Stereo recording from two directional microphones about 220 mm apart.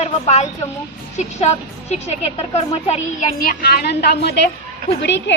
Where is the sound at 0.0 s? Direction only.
30° left (ahead or behind).